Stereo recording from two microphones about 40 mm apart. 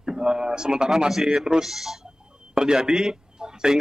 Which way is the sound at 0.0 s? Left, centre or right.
Centre.